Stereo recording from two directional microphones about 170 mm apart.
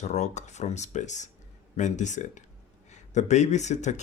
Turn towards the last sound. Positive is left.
turn(degrees=45)  # may be behind; listen again after turning